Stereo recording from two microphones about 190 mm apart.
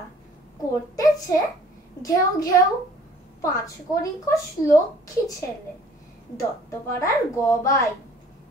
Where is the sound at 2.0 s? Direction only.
20° left (ahead or behind).